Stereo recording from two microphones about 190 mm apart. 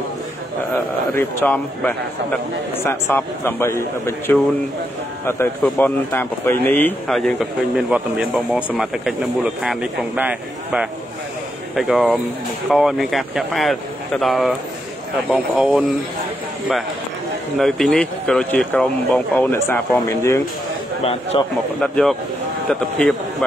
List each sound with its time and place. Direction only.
1.1 s a man's voice: 10° left (ahead or behind)
5.6 s speech: 10° left (ahead or behind)
17.6 s speech: centre (ahead or behind)
21.0 s a man's voice: 30° left (ahead or behind)
21.8 s speech: 5° left (ahead or behind)